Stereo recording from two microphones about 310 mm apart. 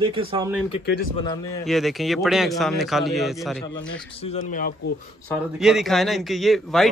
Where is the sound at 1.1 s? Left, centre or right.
Centre.